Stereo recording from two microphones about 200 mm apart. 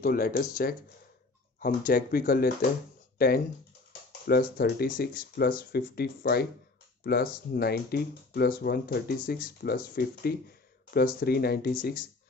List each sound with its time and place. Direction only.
0.0 s speech: 45° left (ahead or behind)